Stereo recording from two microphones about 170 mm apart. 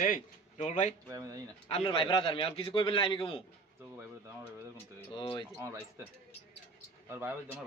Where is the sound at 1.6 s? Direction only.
30° left (ahead or behind).